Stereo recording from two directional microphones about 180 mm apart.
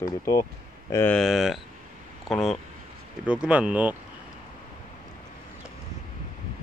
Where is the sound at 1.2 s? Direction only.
Centre (ahead or behind).